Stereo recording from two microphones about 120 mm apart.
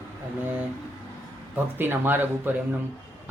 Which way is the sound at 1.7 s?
15° right (ahead or behind).